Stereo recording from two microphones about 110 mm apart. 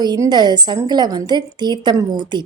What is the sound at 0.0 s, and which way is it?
A woman's voice, 40° right (ahead or behind).